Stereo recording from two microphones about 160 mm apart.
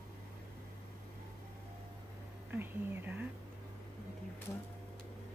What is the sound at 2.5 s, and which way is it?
Speech, 10° right (ahead or behind).